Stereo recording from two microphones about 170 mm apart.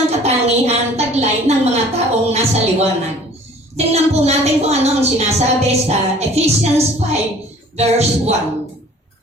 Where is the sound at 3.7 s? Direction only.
40° right (ahead or behind).